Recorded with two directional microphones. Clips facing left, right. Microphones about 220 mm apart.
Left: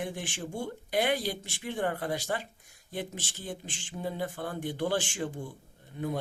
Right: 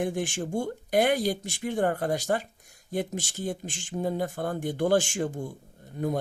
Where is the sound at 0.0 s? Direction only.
45° right (ahead or behind).